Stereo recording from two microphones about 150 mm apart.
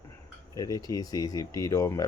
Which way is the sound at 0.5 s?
25° left (ahead or behind).